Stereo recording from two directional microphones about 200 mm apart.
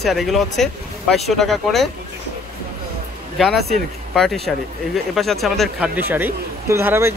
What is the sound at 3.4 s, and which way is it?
Speech, centre (ahead or behind).